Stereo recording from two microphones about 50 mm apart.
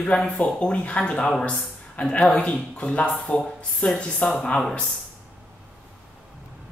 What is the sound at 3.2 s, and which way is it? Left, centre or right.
Speech, centre.